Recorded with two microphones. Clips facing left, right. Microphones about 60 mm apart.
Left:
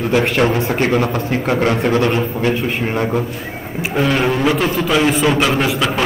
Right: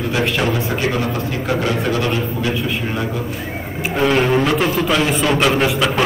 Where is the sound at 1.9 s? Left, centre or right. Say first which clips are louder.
Left 4 dB; left.